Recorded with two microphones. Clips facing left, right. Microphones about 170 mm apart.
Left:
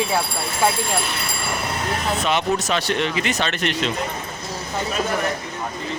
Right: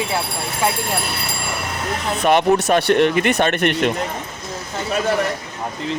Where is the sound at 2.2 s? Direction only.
55° right (ahead or behind).